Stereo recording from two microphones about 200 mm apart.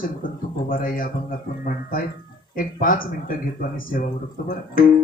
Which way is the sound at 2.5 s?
45° left (ahead or behind).